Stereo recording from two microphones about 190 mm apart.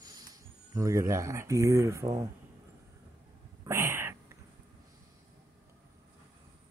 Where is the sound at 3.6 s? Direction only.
15° right (ahead or behind).